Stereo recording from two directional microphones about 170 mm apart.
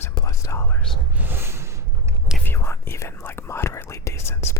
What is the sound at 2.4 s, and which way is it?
Whispering, 15° left (ahead or behind).